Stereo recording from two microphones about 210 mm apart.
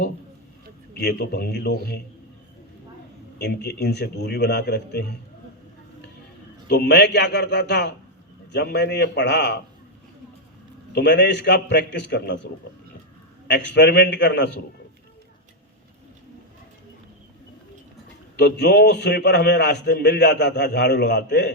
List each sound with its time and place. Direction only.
0.9 s a man's voice: 50° left (ahead or behind)
3.3 s a man's voice: 50° left (ahead or behind)
6.7 s a man's voice: 50° left (ahead or behind)
10.9 s a man's voice: 55° left (ahead or behind)
13.5 s a man's voice: 55° left (ahead or behind)
18.3 s a man's voice: 50° left (ahead or behind)